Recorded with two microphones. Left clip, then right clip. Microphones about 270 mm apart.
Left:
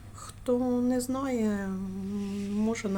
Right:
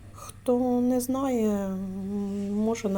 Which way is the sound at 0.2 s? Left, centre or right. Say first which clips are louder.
Right 3 dB; centre.